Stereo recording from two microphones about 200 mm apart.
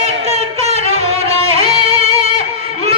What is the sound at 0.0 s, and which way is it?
Music, 30° right (ahead or behind).